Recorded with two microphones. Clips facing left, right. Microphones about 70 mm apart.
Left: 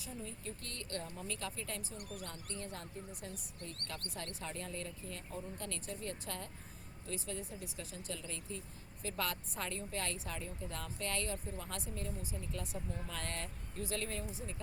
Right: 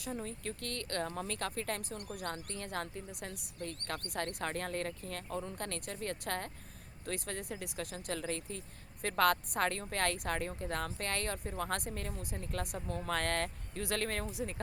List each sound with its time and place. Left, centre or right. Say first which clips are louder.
0.0 s speech: right 6 dB; right